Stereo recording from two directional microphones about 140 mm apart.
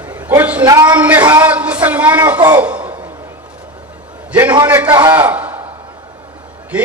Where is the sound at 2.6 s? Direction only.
10° right (ahead or behind).